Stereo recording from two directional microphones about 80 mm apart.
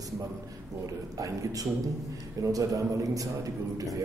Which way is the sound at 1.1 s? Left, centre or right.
Right.